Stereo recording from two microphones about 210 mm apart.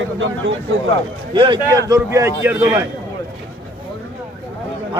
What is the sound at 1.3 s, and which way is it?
A man's voice, 20° right (ahead or behind).